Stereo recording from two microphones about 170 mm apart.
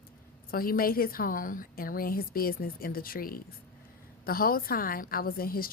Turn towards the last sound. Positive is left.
turn(degrees=60)  # may be behind; listen again after turning